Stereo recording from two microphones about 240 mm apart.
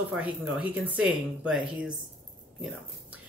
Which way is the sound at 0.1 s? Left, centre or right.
Centre.